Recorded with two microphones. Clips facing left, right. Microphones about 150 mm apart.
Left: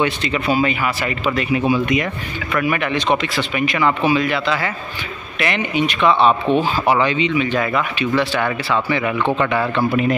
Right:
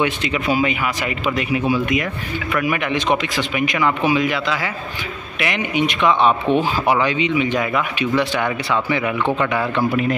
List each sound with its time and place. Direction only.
0.0 s speech: 10° right (ahead or behind)
1.7 s speech: 5° right (ahead or behind)